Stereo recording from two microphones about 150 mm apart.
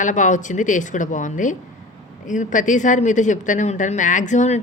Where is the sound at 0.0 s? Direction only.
55° left (ahead or behind).